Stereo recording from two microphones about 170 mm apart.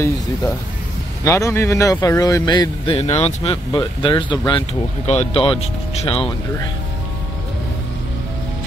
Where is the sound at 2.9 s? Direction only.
35° left (ahead or behind).